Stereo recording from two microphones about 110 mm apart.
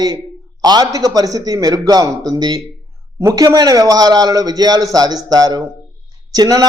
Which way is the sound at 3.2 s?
30° right (ahead or behind).